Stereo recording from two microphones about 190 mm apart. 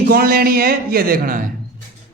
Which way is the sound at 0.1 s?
50° right (ahead or behind).